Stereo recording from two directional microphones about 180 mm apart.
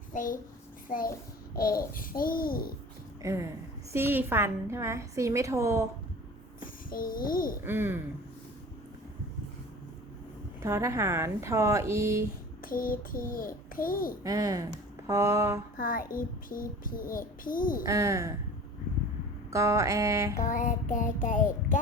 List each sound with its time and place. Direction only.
0.1 s a child's voice: 50° left (ahead or behind)
1.9 s child singing: 50° left (ahead or behind)
3.2 s a woman's voice: 15° right (ahead or behind)
6.6 s child singing: 50° left (ahead or behind)
7.6 s a woman's voice: 10° right (ahead or behind)
10.6 s a woman's voice: 15° right (ahead or behind)
12.6 s child singing: 50° left (ahead or behind)
14.3 s a sound: 20° right (ahead or behind)
15.8 s child singing: 50° left (ahead or behind)
17.8 s a woman's voice: 15° right (ahead or behind)
19.5 s a woman's voice: 15° right (ahead or behind)
20.4 s child singing: 45° left (ahead or behind)